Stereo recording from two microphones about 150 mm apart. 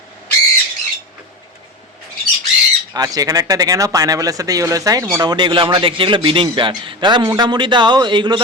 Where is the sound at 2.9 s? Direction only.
25° right (ahead or behind).